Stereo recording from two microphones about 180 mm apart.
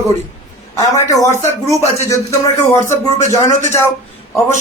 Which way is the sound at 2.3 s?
15° left (ahead or behind).